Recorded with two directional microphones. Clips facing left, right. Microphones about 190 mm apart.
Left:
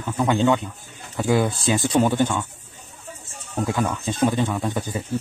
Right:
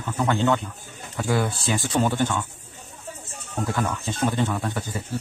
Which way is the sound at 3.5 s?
10° left (ahead or behind).